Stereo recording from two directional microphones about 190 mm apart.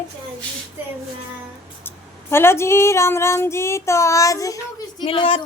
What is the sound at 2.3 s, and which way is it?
Child singing, 15° left (ahead or behind).